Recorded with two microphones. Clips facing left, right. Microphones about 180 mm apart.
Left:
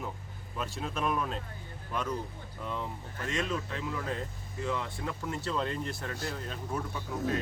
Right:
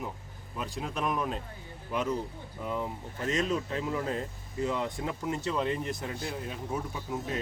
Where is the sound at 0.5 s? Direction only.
15° right (ahead or behind).